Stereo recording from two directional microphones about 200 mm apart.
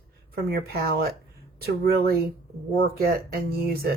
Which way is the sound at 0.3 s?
50° right (ahead or behind).